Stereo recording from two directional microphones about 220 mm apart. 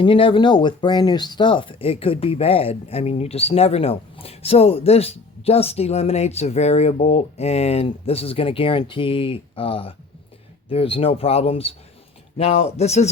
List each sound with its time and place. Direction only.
0.0 s speech: 25° left (ahead or behind)